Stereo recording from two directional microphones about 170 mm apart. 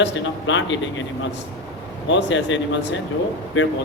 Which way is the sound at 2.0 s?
90° left.